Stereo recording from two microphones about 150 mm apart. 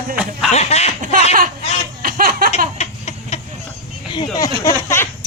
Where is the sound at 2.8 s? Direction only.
45° left (ahead or behind).